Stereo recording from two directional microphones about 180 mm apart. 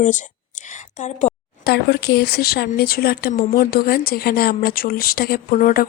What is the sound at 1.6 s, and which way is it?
Speech, 65° left (ahead or behind).